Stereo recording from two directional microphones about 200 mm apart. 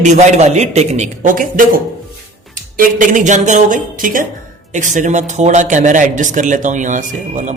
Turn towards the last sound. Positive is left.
turn(degrees=-40)  # may be behind; listen again after turning